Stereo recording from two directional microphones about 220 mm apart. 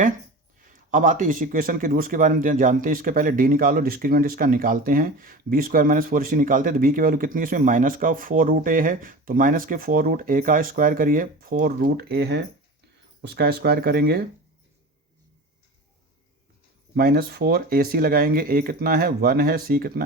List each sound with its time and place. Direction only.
0.9 s speech: 35° right (ahead or behind)
16.9 s speech: 45° right (ahead or behind)